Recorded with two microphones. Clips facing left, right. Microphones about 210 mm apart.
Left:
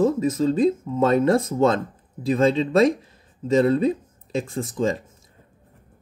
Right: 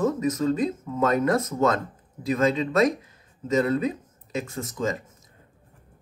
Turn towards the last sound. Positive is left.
turn(degrees=30)  # may be behind; listen again after turning